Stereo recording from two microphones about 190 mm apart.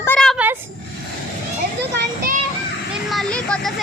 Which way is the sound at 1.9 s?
55° right (ahead or behind).